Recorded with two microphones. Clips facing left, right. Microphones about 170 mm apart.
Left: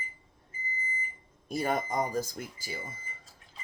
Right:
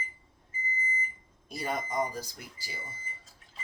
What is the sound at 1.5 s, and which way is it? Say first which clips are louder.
Speech: left 4 dB; 50° left (ahead or behind).